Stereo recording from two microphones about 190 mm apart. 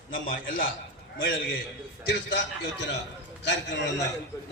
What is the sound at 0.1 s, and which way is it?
Speech, 45° left (ahead or behind).